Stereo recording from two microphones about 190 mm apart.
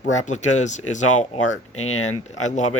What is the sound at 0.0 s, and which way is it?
Speech, 40° left (ahead or behind).